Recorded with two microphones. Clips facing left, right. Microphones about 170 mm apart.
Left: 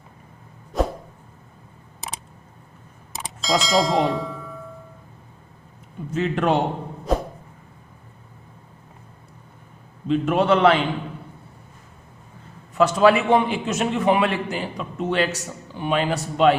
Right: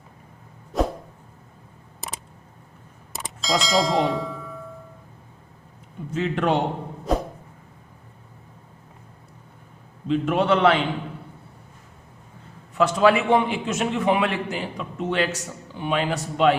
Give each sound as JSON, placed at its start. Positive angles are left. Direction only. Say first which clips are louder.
{"t": 0.7, "sound": "a sound", "louder": "even", "side_deg": 0}
{"t": 3.2, "sound": "clang", "louder": "left 2 dB", "side_deg": 0}
{"t": 6.1, "sound": "a man's voice", "louder": "left 2 dB", "side_deg": 45}
{"t": 7.1, "sound": "a sound", "louder": "left 1 dB", "side_deg": 0}
{"t": 10.1, "sound": "a man's voice", "louder": "left 2 dB", "side_deg": 45}
{"t": 12.7, "sound": "a man's voice", "louder": "left 2 dB", "side_deg": 40}